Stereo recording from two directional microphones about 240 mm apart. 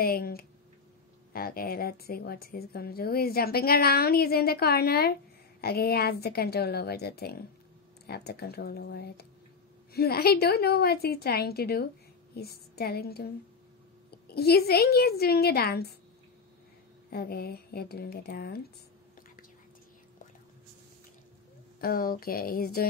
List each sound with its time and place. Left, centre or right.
0.0 s speech: left
17.1 s speech: left
21.8 s speech: left